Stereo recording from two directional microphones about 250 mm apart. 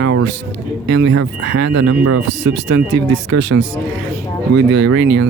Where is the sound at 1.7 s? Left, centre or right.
Right.